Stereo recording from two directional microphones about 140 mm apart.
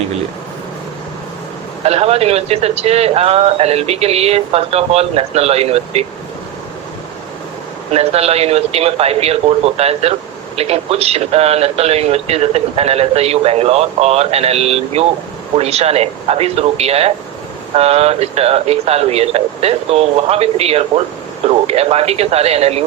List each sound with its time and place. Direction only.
1.8 s speech: 45° right (ahead or behind)
7.9 s speech: 45° right (ahead or behind)